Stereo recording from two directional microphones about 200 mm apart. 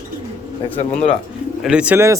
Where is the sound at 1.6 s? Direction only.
5° right (ahead or behind).